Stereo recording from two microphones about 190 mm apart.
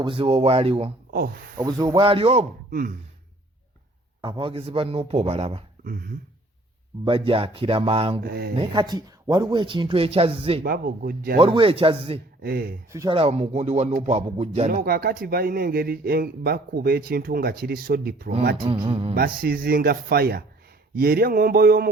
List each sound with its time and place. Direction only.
0.0 s speech: 30° right (ahead or behind)
4.2 s speech: 25° right (ahead or behind)
5.8 s speech: 50° right (ahead or behind)
7.0 s speech: 30° right (ahead or behind)
8.2 s speech: 55° right (ahead or behind)
8.5 s speech: 25° right (ahead or behind)
10.6 s speech: 50° right (ahead or behind)
11.3 s speech: 30° right (ahead or behind)
12.4 s speech: 55° right (ahead or behind)
12.9 s speech: 15° right (ahead or behind)
13.1 s speech: 30° right (ahead or behind)
14.8 s speech: 50° right (ahead or behind)
18.5 s speech: 25° right (ahead or behind)
19.1 s speech: 50° right (ahead or behind)